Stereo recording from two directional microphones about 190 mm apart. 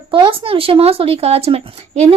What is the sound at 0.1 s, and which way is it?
Speech, 25° right (ahead or behind).